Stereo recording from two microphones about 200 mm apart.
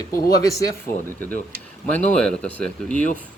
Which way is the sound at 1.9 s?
5° left (ahead or behind).